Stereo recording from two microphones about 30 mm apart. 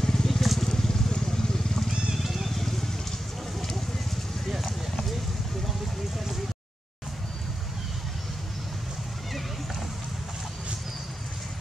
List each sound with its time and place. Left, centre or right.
0.0 s vehicle: centre
0.3 s vehicle: centre
0.6 s vehicle: centre
2.1 s a sound: centre